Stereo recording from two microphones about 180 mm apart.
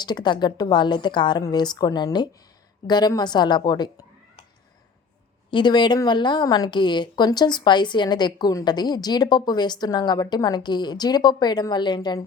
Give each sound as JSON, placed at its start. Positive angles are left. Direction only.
{"t": 0.0, "sound": "a woman's voice", "side_deg": 25}
{"t": 5.5, "sound": "a woman's voice", "side_deg": 25}